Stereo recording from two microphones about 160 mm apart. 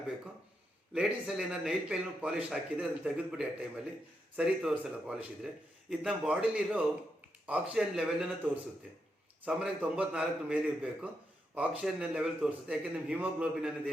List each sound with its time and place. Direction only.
0.9 s a man's voice: 5° right (ahead or behind)
9.4 s a man's voice: 5° right (ahead or behind)